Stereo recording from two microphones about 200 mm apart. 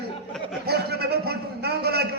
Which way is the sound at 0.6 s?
55° right (ahead or behind).